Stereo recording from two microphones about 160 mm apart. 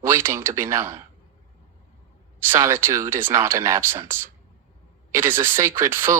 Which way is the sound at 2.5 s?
15° right (ahead or behind).